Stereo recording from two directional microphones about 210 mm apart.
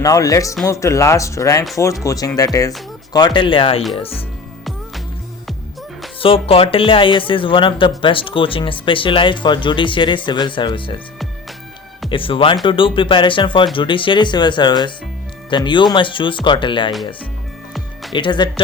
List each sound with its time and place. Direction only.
0.0 s speech: 15° left (ahead or behind)
6.1 s speech: 25° left (ahead or behind)
12.0 s speech: 25° left (ahead or behind)
18.1 s speech: 20° left (ahead or behind)